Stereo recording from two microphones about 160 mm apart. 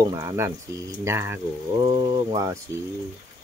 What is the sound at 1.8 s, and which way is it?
Speech, 30° right (ahead or behind).